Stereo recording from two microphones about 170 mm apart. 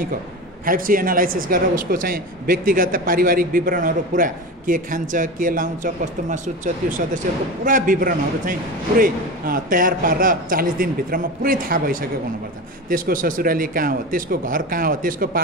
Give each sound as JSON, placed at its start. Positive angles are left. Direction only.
{"t": 0.7, "sound": "speech", "side_deg": -55}